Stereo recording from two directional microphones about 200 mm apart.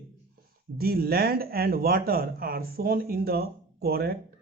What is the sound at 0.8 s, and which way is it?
Speech, 50° right (ahead or behind).